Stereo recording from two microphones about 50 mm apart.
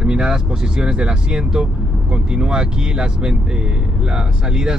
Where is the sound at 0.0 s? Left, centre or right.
Centre.